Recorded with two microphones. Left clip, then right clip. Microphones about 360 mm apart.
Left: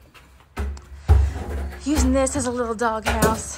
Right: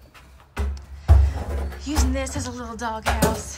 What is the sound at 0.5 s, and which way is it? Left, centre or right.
Music, centre.